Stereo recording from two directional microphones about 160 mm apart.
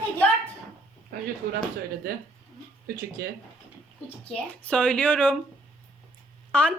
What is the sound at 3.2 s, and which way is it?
Speech, 75° right (ahead or behind).